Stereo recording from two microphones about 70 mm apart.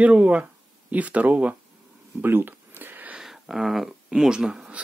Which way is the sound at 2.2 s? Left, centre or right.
Right.